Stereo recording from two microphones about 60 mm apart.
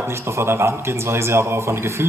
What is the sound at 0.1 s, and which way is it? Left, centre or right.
Speech, right.